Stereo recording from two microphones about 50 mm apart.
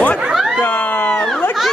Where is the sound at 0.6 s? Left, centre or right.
Left.